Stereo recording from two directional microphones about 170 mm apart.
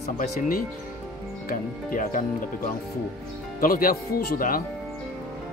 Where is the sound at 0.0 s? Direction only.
50° left (ahead or behind).